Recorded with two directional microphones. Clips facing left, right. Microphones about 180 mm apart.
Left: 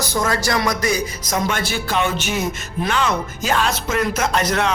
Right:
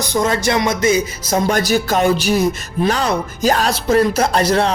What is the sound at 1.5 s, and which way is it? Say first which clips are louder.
Speech: right 7 dB; 40° right (ahead or behind).